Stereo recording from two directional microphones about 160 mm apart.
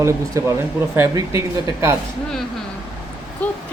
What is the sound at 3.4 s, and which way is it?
Speech, 10° left (ahead or behind).